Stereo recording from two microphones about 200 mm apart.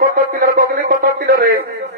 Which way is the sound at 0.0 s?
45° right (ahead or behind).